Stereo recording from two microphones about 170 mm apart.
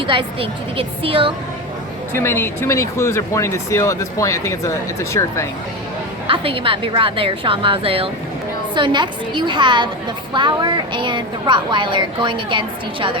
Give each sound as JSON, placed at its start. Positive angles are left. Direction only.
{"t": 0.1, "sound": "a woman's voice", "side_deg": -30}
{"t": 2.1, "sound": "speech", "side_deg": 15}
{"t": 6.2, "sound": "a woman's voice", "side_deg": -30}